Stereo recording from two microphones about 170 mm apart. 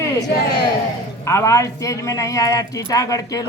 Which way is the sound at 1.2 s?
15° left (ahead or behind).